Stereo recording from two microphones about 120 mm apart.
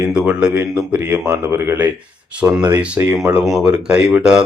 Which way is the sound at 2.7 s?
10° right (ahead or behind).